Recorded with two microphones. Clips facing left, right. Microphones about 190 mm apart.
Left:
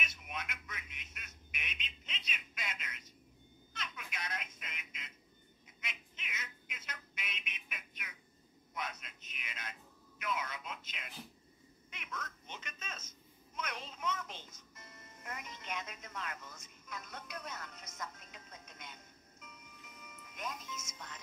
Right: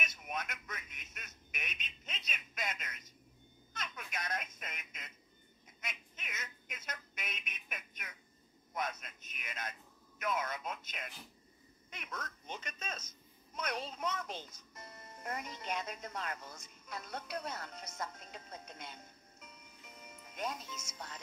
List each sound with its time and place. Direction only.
0.0 s telephone: 45° right (ahead or behind)
5.8 s a sound: 45° right (ahead or behind)
11.9 s telephone: 40° right (ahead or behind)
13.6 s music: 35° right (ahead or behind)
20.0 s music: 30° right (ahead or behind)